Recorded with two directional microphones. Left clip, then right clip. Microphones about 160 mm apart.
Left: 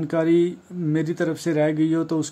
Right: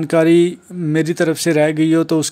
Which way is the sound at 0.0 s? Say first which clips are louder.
Right 7 dB; 30° right (ahead or behind).